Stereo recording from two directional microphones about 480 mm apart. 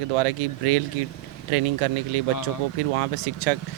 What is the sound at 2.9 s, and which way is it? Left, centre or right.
Speech, right.